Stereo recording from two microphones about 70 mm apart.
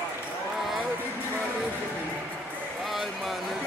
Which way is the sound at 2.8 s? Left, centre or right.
Centre.